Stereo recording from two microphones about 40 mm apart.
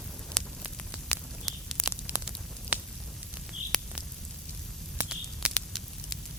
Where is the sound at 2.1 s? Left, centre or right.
Right.